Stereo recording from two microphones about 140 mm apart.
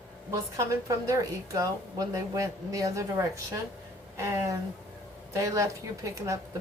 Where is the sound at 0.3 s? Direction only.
20° right (ahead or behind).